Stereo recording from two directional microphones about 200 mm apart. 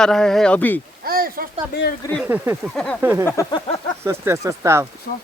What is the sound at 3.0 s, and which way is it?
Speech, 15° right (ahead or behind).